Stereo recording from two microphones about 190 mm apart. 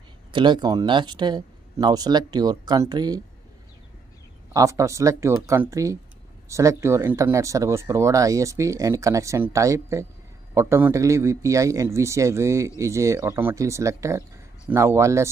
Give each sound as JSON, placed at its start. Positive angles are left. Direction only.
{"t": 0.3, "sound": "speech", "side_deg": -25}
{"t": 4.6, "sound": "a man's voice", "side_deg": -15}